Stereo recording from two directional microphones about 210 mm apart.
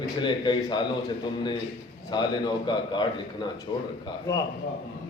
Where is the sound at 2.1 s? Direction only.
20° left (ahead or behind).